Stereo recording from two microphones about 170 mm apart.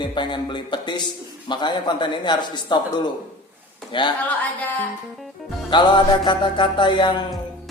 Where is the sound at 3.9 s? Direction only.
25° left (ahead or behind).